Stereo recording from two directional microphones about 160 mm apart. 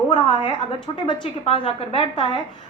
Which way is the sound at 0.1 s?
30° left (ahead or behind).